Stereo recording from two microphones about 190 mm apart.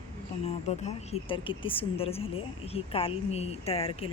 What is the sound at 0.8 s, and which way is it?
Speech, 30° left (ahead or behind).